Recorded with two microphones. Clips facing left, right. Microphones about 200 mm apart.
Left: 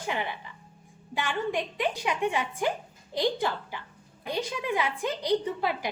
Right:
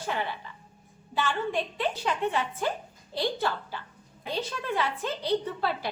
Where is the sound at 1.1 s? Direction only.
15° left (ahead or behind).